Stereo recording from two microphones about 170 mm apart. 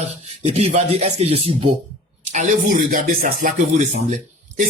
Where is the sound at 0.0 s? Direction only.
40° right (ahead or behind).